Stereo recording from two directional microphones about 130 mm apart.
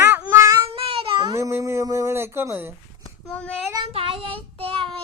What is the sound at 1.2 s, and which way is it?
Music, 25° right (ahead or behind).